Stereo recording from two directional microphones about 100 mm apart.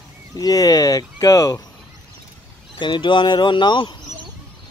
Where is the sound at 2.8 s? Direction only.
55° left (ahead or behind).